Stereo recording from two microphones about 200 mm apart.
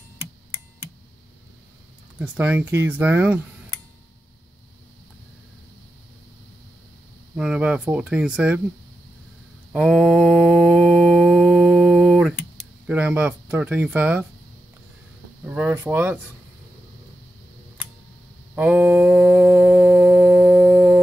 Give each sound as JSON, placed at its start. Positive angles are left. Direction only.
{"t": 2.1, "sound": "speech", "side_deg": -5}
{"t": 7.3, "sound": "speech", "side_deg": -5}
{"t": 9.7, "sound": "mantra", "side_deg": 0}
{"t": 11.2, "sound": "a sound", "side_deg": 0}
{"t": 12.8, "sound": "speech", "side_deg": -5}
{"t": 15.4, "sound": "speech", "side_deg": -10}
{"t": 18.5, "sound": "a sound", "side_deg": -5}